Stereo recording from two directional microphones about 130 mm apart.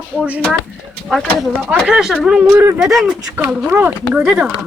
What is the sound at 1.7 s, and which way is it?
Speech, 5° right (ahead or behind).